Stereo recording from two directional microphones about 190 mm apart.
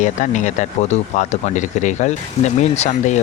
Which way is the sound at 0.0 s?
40° left (ahead or behind).